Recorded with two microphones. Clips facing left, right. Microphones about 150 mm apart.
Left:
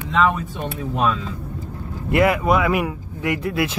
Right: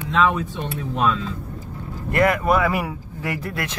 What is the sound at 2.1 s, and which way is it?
Speech, 5° left (ahead or behind).